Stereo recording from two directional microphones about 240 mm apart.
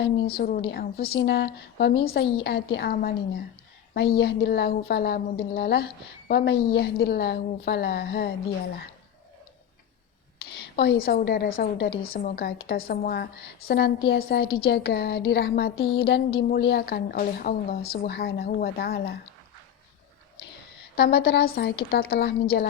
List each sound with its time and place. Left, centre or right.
0.0 s speech: left
10.8 s speech: left
20.9 s speech: left